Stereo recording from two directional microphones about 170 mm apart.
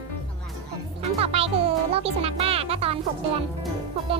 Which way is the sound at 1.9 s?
35° right (ahead or behind).